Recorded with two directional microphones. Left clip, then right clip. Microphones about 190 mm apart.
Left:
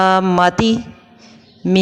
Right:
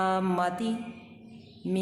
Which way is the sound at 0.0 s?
40° left (ahead or behind).